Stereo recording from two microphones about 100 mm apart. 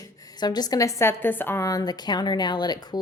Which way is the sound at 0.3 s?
45° left (ahead or behind).